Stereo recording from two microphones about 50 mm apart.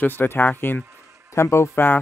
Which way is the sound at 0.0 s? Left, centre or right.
Left.